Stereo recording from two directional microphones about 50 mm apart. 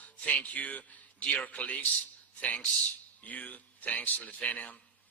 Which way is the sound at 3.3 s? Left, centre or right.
Left.